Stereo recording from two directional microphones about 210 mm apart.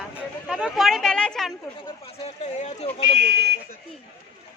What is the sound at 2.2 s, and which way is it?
Speech, 30° left (ahead or behind).